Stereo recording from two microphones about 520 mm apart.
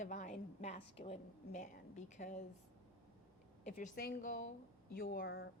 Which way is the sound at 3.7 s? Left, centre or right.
Centre.